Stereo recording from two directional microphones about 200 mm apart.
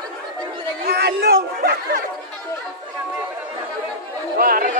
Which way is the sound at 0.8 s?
50° right (ahead or behind).